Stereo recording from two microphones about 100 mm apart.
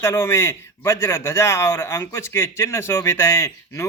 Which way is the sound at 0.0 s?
25° left (ahead or behind).